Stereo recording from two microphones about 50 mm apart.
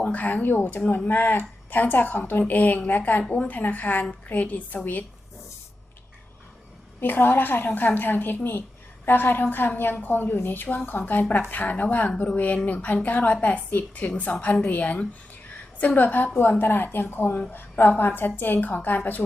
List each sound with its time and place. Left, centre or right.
0.0 s a woman's voice: left
7.0 s a woman's voice: left